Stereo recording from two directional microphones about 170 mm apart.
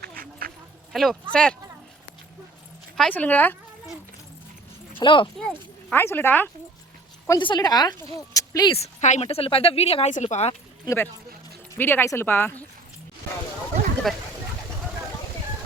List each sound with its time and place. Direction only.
0.2 s duck: 60° right (ahead or behind)
0.9 s speech: 5° left (ahead or behind)
2.9 s speech: 5° left (ahead or behind)
4.9 s a woman's voice: 30° left (ahead or behind)
5.9 s speech: 10° left (ahead or behind)
7.3 s a woman's voice: 25° left (ahead or behind)
8.7 s speech: 40° left (ahead or behind)
10.8 s speech: 15° left (ahead or behind)
14.1 s speech: centre (ahead or behind)